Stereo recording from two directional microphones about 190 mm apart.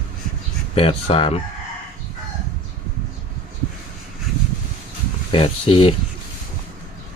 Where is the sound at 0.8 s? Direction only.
30° left (ahead or behind).